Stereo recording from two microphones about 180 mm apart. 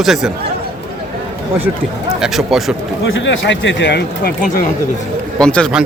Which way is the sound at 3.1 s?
90° left.